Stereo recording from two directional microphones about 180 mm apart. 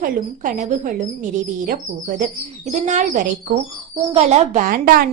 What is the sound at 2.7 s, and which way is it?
A woman's voice, 40° right (ahead or behind).